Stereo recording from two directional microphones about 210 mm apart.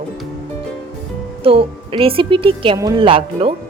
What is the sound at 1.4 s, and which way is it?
A woman's voice, 25° right (ahead or behind).